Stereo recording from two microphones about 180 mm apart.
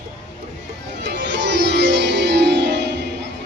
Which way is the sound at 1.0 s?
70° right (ahead or behind).